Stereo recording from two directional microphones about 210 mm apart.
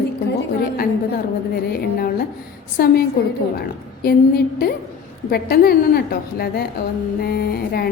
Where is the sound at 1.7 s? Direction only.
45° left (ahead or behind).